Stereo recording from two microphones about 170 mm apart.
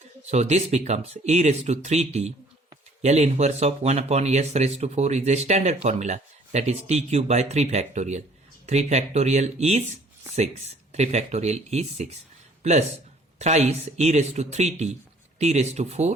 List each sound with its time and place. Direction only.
0.3 s speech: 40° right (ahead or behind)
10.9 s speech: 40° right (ahead or behind)
13.4 s speech: 40° right (ahead or behind)